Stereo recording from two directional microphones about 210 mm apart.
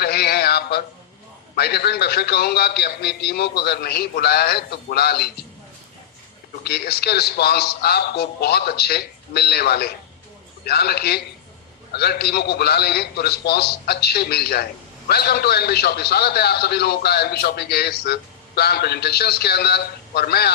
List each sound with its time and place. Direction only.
0.0 s a sound: 50° left (ahead or behind)
1.5 s a man's voice: 50° left (ahead or behind)
6.7 s a man's voice: 50° left (ahead or behind)